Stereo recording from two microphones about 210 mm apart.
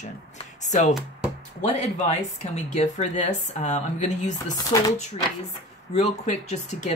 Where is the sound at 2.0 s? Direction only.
30° left (ahead or behind).